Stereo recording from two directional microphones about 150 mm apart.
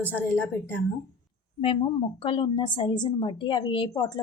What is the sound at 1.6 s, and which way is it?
A woman's voice, 35° left (ahead or behind).